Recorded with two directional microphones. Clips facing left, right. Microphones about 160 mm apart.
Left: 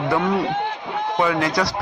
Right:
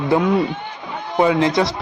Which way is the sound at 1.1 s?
25° right (ahead or behind).